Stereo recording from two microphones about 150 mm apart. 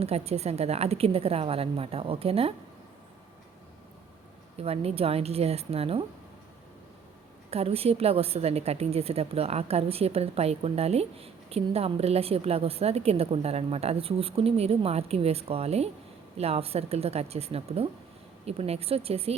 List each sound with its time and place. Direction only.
0.0 s a woman's voice: 45° right (ahead or behind)
4.5 s a woman's voice: 40° right (ahead or behind)
7.5 s a woman's voice: 40° right (ahead or behind)